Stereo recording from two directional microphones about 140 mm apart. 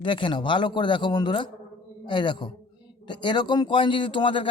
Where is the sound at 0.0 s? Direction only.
35° left (ahead or behind).